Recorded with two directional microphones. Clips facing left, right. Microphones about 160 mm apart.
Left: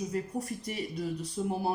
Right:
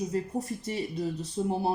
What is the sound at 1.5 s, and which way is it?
Speech, 25° right (ahead or behind).